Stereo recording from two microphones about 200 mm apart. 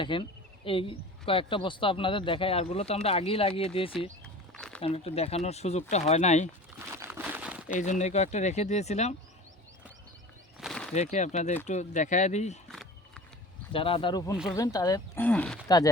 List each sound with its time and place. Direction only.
0.0 s speech: 25° left (ahead or behind)
4.2 s a sound: 5° left (ahead or behind)
4.8 s speech: 30° left (ahead or behind)
6.7 s crumpling: 15° right (ahead or behind)
7.8 s speech: 35° left (ahead or behind)
10.6 s a sound: 5° left (ahead or behind)
10.9 s speech: 35° left (ahead or behind)
12.7 s a sound: centre (ahead or behind)
13.7 s speech: 25° left (ahead or behind); by 15.5 s 5° left (ahead or behind)